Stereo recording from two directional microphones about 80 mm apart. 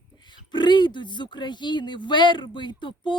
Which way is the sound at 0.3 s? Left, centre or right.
Left.